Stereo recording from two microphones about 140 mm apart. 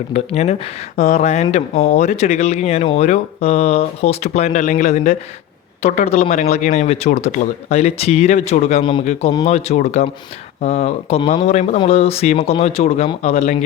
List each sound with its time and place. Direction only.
0.1 s speech: 50° left (ahead or behind)
8.8 s speech: 35° left (ahead or behind)
9.5 s speech: 50° left (ahead or behind)